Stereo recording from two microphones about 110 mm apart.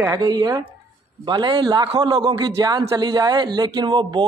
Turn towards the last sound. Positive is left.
turn(degrees=-40)  # may be behind; listen again after turning